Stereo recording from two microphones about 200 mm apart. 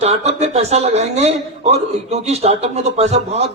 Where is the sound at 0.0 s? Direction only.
35° right (ahead or behind).